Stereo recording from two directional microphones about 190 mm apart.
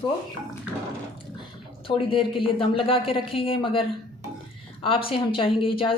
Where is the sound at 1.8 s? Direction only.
25° left (ahead or behind).